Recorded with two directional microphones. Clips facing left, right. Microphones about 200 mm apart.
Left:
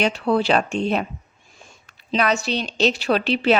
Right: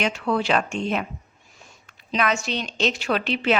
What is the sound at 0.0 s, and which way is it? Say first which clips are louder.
A woman's voice: left 4 dB; 35° left (ahead or behind).